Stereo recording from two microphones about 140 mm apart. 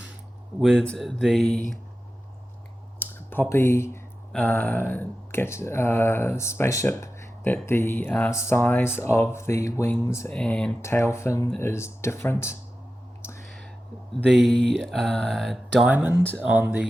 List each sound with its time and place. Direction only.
0.6 s speech: centre (ahead or behind)
3.0 s speech: 15° left (ahead or behind)
10.3 s speech: 5° left (ahead or behind)
10.8 s speech: 20° left (ahead or behind)
13.2 s whispering: 20° left (ahead or behind)
14.1 s speech: centre (ahead or behind)